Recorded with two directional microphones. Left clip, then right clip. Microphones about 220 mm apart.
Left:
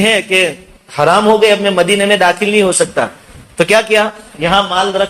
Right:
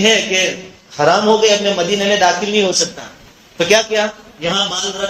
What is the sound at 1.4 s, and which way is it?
A man's voice, 50° left (ahead or behind).